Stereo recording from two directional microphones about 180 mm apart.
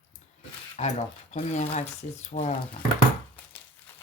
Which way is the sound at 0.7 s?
35° left (ahead or behind).